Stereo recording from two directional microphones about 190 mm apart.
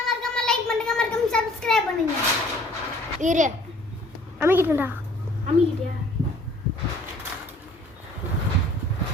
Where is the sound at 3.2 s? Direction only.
40° right (ahead or behind).